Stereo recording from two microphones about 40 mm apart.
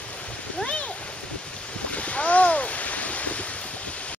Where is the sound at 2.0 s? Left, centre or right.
Left.